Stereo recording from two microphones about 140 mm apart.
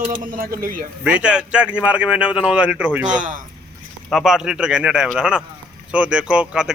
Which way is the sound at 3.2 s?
70° right (ahead or behind).